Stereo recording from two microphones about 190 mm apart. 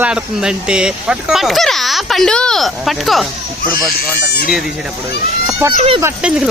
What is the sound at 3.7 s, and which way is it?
Speech, 55° left (ahead or behind).